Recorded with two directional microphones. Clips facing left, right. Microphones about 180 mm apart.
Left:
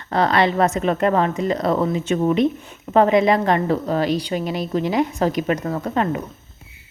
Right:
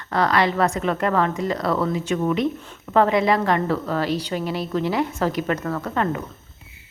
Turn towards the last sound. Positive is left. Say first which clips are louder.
# left 2 dB
turn(degrees=20)  # may be behind; listen again after turning